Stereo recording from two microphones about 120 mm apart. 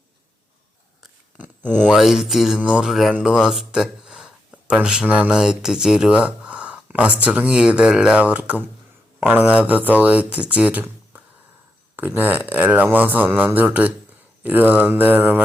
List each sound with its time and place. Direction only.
1.7 s mantra: 5° left (ahead or behind)
2.6 s speech: 10° right (ahead or behind)